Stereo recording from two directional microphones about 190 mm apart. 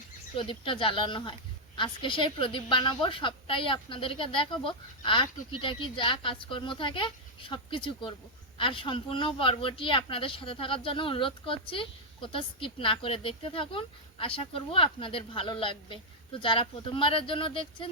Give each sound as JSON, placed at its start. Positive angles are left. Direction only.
{"t": 0.3, "sound": "speech", "side_deg": 25}